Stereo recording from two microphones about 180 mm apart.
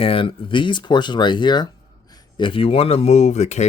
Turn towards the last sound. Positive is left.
turn(degrees=40)  # may be behind; listen again after turning